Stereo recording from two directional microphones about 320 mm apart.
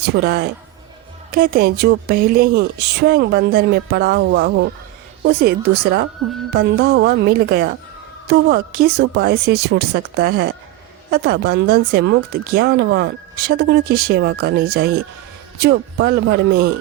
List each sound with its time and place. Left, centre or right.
0.0 s a woman's voice: right